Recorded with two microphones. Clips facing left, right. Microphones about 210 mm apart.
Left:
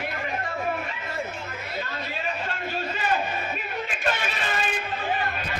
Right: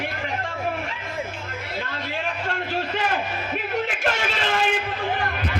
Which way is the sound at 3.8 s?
80° right.